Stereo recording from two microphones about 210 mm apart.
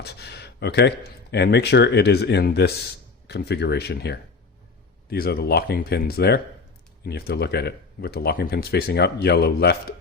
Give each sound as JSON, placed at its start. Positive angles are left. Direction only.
{"t": 0.0, "sound": "speech", "side_deg": 50}